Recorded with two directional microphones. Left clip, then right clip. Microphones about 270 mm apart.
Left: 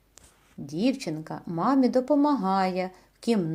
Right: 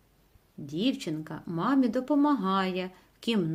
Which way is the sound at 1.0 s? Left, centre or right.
Centre.